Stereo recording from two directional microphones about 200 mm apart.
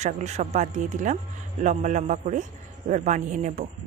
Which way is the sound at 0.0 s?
35° right (ahead or behind).